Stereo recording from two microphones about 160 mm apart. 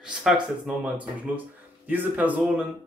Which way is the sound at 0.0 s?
5° right (ahead or behind).